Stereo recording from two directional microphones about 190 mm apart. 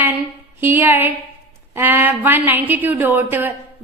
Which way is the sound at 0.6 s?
10° right (ahead or behind).